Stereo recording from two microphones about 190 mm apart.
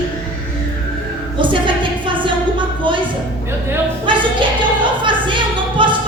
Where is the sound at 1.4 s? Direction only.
25° right (ahead or behind).